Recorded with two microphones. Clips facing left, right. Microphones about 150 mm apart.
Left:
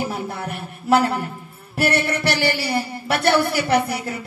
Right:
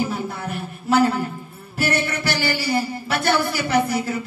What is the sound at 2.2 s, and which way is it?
Speech, 65° left (ahead or behind).